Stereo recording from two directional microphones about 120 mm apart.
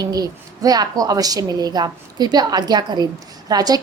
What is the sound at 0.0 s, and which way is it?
A woman's voice, 35° right (ahead or behind).